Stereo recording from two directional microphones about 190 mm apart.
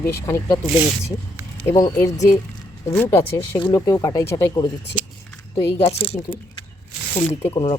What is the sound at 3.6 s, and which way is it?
Speech, 25° left (ahead or behind).